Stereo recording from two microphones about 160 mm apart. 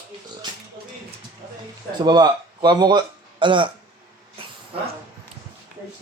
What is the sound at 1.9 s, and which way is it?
Speech, 25° right (ahead or behind).